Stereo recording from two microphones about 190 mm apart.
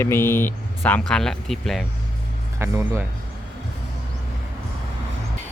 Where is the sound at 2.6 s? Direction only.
15° right (ahead or behind).